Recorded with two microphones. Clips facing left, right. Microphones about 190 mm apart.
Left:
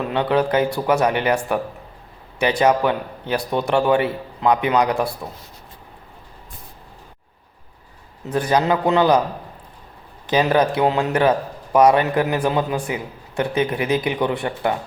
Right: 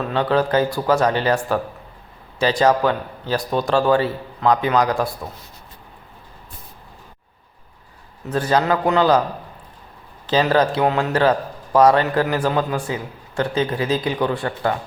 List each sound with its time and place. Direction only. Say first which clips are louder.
0.0 s a man's voice: even; 20° left (ahead or behind)
8.3 s a man's voice: even; 15° left (ahead or behind)
10.2 s a man's voice: even; 15° left (ahead or behind)